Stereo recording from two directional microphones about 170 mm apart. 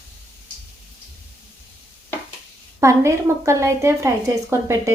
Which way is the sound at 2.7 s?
15° right (ahead or behind).